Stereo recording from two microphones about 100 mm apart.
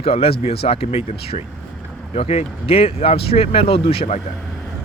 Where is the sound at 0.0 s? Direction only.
75° left (ahead or behind).